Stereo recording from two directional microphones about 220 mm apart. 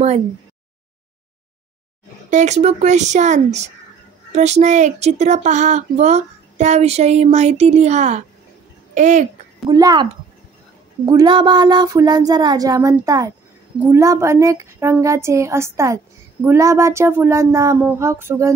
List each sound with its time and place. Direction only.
2.3 s speech: 30° right (ahead or behind)
9.7 s a woman's voice: 20° right (ahead or behind)
11.1 s a woman's voice: 20° right (ahead or behind)